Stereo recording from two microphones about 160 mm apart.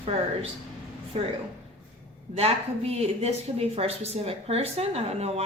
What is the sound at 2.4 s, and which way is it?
A woman's voice, 40° right (ahead or behind).